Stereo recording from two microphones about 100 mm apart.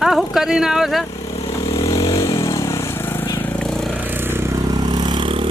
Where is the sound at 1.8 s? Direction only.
35° left (ahead or behind); by 3.6 s 20° left (ahead or behind).